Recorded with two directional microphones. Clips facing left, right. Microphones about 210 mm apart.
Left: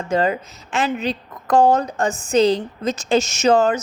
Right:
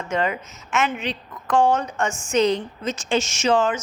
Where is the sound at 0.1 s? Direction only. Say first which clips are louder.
Left 5 dB; 35° left (ahead or behind).